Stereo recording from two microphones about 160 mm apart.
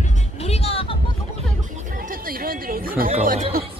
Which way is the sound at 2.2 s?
65° right (ahead or behind).